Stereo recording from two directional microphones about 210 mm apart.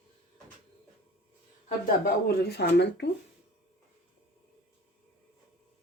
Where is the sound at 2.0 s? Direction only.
50° left (ahead or behind).